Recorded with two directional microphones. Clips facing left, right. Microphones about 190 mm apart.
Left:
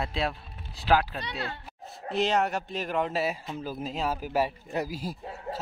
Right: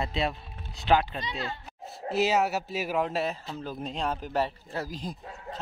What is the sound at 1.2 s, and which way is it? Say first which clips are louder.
Speech: right 1 dB; 55° left (ahead or behind).